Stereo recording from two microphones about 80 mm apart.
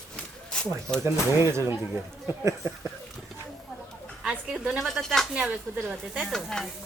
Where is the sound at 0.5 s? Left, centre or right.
Centre.